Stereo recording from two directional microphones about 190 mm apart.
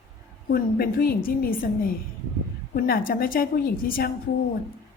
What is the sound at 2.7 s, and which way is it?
A woman's voice, 50° left (ahead or behind).